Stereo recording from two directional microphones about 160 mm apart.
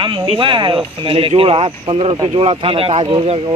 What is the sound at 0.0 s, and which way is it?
Speech, 30° right (ahead or behind).